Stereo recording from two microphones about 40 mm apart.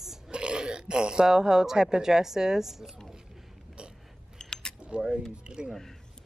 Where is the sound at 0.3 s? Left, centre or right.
Right; by 3.0 s centre.